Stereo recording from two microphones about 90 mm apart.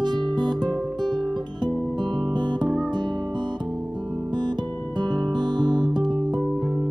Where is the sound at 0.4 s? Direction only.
55° right (ahead or behind).